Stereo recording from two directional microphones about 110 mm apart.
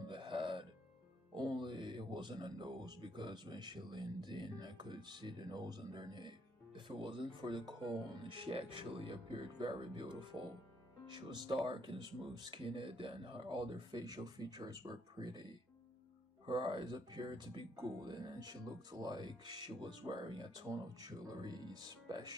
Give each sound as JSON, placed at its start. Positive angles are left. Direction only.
{"t": 0.1, "sound": "music", "side_deg": -50}
{"t": 1.3, "sound": "speech", "side_deg": -45}
{"t": 16.4, "sound": "speech", "side_deg": -45}